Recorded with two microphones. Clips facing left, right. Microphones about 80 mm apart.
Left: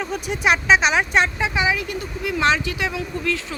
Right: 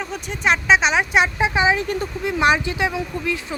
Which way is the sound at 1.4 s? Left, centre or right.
Right.